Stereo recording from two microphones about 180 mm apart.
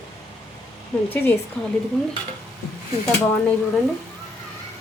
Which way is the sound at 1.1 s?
10° left (ahead or behind).